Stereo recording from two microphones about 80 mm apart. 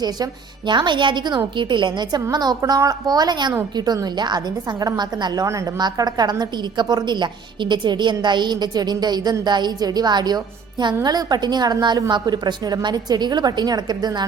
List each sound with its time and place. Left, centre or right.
0.0 s a woman's voice: right
1.5 s a woman's voice: right
2.3 s a woman's voice: right
5.5 s a woman's voice: right